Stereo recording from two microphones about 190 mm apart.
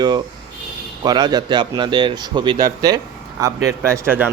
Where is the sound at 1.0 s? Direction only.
20° right (ahead or behind).